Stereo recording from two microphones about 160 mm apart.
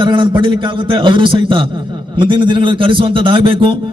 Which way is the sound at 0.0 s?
30° right (ahead or behind).